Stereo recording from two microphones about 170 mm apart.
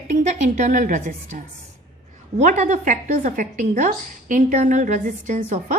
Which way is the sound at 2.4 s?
45° right (ahead or behind).